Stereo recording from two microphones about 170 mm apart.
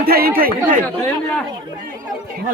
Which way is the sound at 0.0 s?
60° right (ahead or behind).